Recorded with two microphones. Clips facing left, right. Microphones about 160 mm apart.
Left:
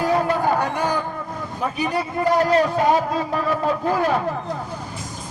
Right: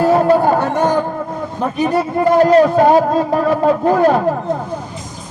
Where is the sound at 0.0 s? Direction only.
45° right (ahead or behind).